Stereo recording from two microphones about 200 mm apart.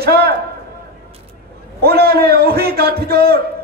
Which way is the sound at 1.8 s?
50° right (ahead or behind).